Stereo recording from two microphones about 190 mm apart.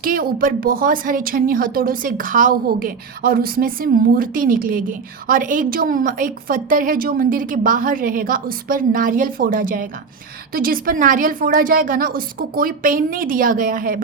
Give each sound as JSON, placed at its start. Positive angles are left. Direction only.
{"t": 0.0, "sound": "speech", "side_deg": -50}